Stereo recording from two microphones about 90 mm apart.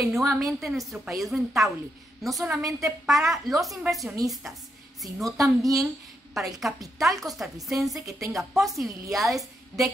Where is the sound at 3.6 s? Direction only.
Centre (ahead or behind).